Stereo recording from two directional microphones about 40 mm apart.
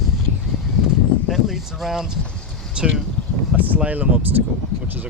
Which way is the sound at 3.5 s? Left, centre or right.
Right.